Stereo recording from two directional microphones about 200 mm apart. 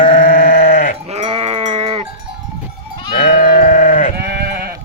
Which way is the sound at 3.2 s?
45° left (ahead or behind).